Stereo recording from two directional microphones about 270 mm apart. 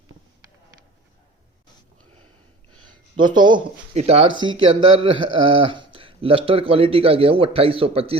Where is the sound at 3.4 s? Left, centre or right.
Centre.